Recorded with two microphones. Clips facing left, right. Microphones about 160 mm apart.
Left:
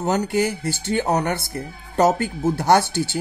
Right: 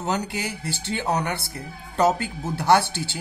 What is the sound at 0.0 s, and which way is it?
Speech, 45° left (ahead or behind).